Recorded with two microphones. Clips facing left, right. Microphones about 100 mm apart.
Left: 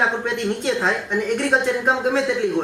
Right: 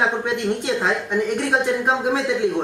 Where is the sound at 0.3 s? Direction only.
10° right (ahead or behind).